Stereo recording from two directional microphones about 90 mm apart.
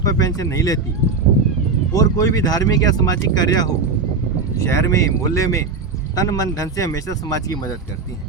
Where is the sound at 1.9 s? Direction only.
40° left (ahead or behind).